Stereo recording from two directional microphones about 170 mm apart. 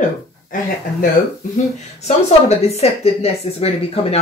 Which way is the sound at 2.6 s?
35° left (ahead or behind).